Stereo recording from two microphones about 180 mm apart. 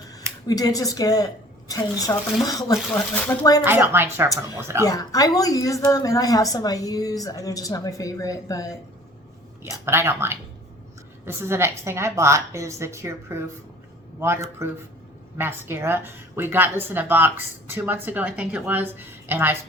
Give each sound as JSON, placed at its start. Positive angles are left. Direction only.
{"t": 0.1, "sound": "speech", "side_deg": 20}
{"t": 3.6, "sound": "a woman's voice", "side_deg": -10}
{"t": 4.9, "sound": "a woman's voice", "side_deg": 20}
{"t": 9.8, "sound": "a woman's voice", "side_deg": -15}
{"t": 15.4, "sound": "a woman's voice", "side_deg": -10}